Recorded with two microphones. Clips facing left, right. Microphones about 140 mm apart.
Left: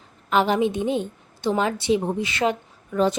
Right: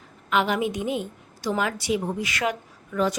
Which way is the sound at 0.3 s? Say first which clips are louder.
Left 3 dB; 35° left (ahead or behind).